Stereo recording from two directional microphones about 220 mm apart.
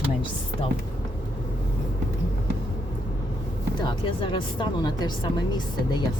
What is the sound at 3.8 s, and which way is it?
A woman's voice, 20° left (ahead or behind).